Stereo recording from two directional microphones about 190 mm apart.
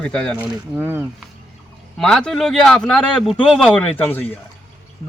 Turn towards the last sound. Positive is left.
turn(degrees=10)  # may be behind; listen again after turning